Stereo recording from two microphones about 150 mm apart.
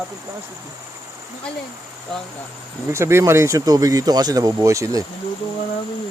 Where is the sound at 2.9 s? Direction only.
20° right (ahead or behind).